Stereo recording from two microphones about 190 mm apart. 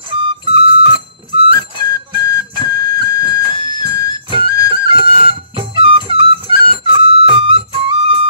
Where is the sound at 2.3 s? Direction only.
20° left (ahead or behind).